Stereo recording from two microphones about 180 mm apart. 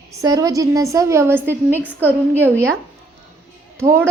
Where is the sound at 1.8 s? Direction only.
10° left (ahead or behind).